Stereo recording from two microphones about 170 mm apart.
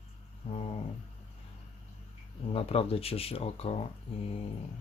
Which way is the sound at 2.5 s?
35° left (ahead or behind).